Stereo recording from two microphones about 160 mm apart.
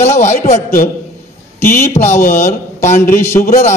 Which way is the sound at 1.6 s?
15° left (ahead or behind).